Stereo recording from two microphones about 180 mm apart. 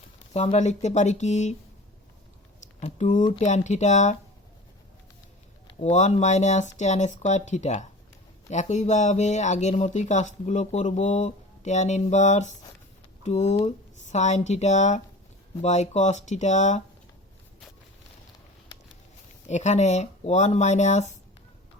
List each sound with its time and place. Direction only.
0.3 s speech: 35° left (ahead or behind)
2.8 s speech: 40° left (ahead or behind)
5.6 s speech: 40° left (ahead or behind)
19.5 s speech: 40° left (ahead or behind)